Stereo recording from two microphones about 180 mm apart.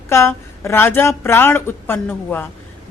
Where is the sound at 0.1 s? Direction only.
15° left (ahead or behind).